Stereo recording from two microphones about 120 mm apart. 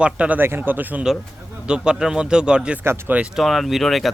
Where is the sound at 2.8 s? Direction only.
20° right (ahead or behind).